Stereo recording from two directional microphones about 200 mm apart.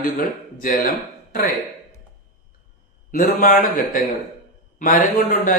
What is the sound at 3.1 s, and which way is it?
Speech, 45° left (ahead or behind).